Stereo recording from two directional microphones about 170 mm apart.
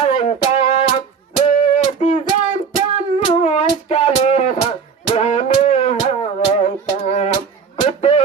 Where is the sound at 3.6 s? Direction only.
40° left (ahead or behind).